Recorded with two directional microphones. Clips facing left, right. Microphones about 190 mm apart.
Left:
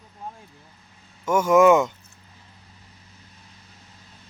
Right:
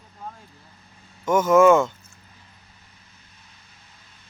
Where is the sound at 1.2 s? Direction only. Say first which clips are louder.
Right 1 dB; 10° left (ahead or behind).